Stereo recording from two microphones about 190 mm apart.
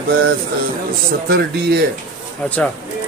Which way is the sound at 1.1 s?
55° right (ahead or behind).